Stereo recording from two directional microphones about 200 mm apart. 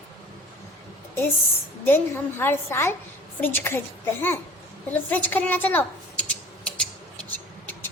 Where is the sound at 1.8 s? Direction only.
10° left (ahead or behind).